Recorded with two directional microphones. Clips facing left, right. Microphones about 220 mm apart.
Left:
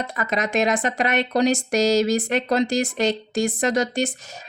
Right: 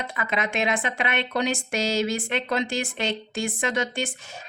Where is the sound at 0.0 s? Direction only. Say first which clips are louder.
Left 3 dB; 40° left (ahead or behind).